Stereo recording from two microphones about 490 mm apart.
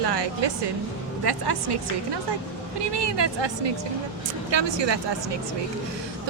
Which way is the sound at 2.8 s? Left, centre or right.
Right.